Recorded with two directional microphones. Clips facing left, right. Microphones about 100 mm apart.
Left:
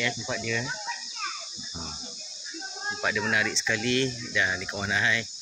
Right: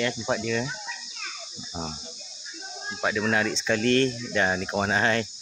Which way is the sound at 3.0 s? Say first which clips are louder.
Right 3 dB; 30° right (ahead or behind).